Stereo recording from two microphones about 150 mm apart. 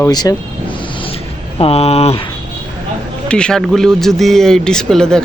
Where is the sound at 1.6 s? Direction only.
40° left (ahead or behind).